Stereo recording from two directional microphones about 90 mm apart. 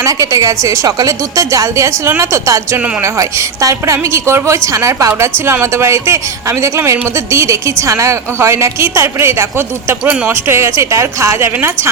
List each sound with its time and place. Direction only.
0.0 s a woman's voice: 40° right (ahead or behind)